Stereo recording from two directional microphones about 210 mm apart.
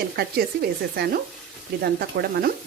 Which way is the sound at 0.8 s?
50° right (ahead or behind).